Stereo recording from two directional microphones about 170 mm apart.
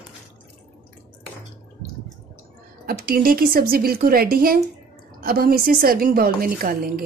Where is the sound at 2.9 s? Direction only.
60° right (ahead or behind).